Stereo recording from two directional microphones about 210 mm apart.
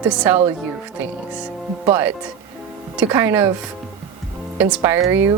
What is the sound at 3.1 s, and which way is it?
Speech, 10° right (ahead or behind).